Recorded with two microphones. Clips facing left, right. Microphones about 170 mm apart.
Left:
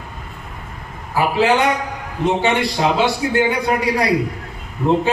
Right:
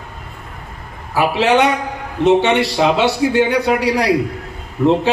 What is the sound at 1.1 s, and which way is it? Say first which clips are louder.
A man's voice: right 2 dB; 75° right (ahead or behind).